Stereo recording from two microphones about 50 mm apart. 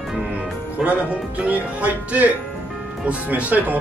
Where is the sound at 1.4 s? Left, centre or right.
Right.